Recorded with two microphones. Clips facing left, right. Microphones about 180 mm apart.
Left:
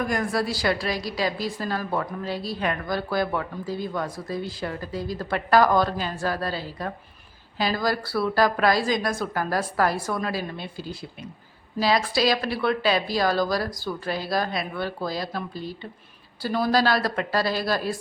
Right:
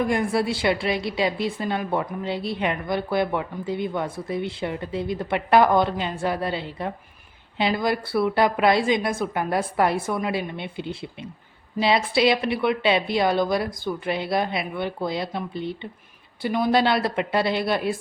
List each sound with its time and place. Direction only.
0.0 s a woman's voice: 25° right (ahead or behind)